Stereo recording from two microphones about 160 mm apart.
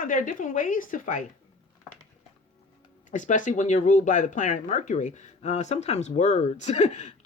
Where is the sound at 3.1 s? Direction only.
50° left (ahead or behind).